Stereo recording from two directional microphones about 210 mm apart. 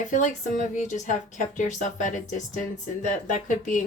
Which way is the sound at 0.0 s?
35° left (ahead or behind).